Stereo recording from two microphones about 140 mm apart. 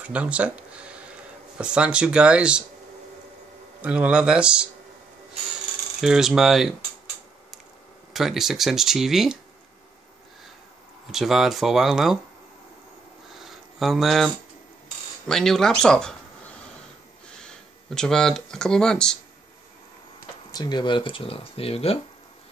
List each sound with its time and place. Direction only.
0.0 s speech: 10° right (ahead or behind)
3.8 s speech: 10° right (ahead or behind)
5.9 s speech: 5° right (ahead or behind)
8.1 s speech: centre (ahead or behind)
11.1 s speech: centre (ahead or behind)
13.4 s a sound: centre (ahead or behind)
15.2 s speech: 5° left (ahead or behind)
17.4 s speech: 5° left (ahead or behind)
20.5 s speech: 30° left (ahead or behind)